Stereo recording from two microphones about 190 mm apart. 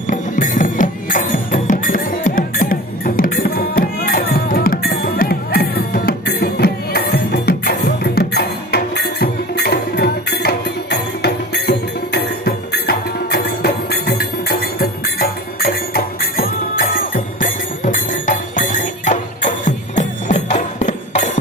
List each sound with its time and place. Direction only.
0.1 s music: 45° left (ahead or behind)